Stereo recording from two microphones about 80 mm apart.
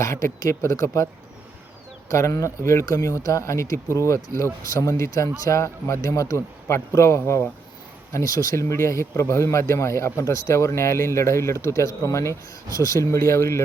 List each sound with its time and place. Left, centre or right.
0.0 s speech: left
2.0 s speech: left